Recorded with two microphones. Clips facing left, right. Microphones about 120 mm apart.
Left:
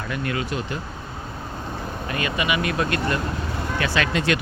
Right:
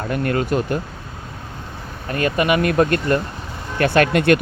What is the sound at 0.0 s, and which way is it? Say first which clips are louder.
Speech: right 6 dB; 50° right (ahead or behind).